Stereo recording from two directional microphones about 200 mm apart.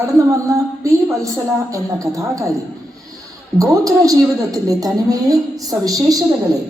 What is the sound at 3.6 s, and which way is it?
A woman's voice, 15° right (ahead or behind).